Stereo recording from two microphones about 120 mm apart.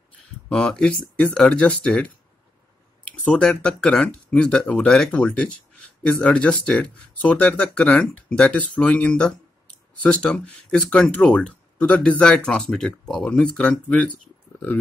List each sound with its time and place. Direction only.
0.5 s speech: 5° left (ahead or behind)
3.3 s speech: 5° left (ahead or behind)